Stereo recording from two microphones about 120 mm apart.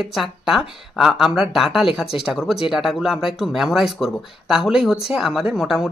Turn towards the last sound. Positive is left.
turn(degrees=-5)  # may be behind; listen again after turning